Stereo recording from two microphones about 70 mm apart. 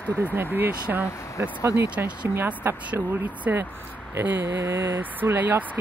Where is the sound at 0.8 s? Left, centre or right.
Centre.